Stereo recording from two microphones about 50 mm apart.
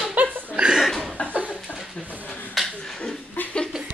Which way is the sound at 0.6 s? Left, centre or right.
Centre.